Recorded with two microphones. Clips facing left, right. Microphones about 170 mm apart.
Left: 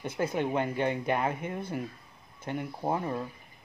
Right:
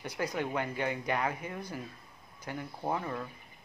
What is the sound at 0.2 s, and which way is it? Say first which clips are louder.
Speech: left 4 dB; 25° left (ahead or behind).